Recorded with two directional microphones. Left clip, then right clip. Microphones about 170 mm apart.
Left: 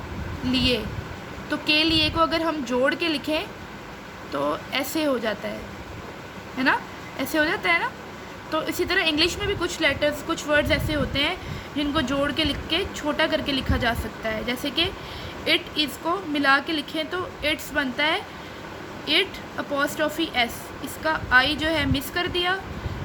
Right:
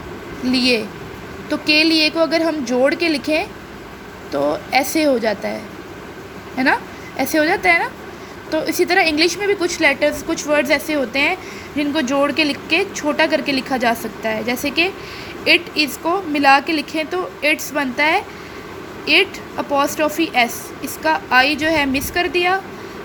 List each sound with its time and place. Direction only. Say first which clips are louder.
0.5 s a woman's voice: right 6 dB; 20° right (ahead or behind)
4.7 s a woman's voice: right 9 dB; 20° right (ahead or behind)
7.2 s a woman's voice: right 7 dB; 20° right (ahead or behind)